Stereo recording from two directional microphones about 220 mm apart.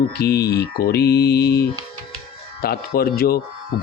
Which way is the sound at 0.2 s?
45° left (ahead or behind).